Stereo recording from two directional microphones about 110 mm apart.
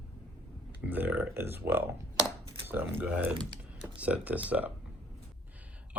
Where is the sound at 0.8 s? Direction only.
15° right (ahead or behind).